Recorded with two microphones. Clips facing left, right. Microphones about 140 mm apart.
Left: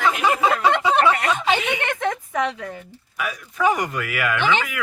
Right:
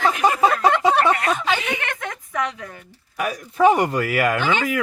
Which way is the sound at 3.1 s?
40° right (ahead or behind).